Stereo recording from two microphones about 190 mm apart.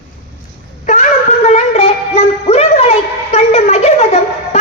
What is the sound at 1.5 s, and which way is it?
Music, 35° left (ahead or behind).